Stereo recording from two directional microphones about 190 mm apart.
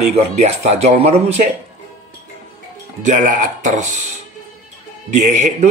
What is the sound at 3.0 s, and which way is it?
Speech, 45° right (ahead or behind).